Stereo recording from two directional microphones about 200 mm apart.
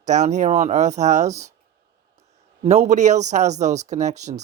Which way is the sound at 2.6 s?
35° right (ahead or behind).